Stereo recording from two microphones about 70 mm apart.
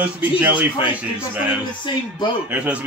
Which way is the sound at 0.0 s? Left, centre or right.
Right.